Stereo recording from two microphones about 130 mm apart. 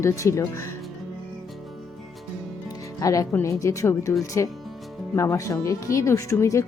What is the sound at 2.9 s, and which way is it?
A woman's voice, 25° left (ahead or behind).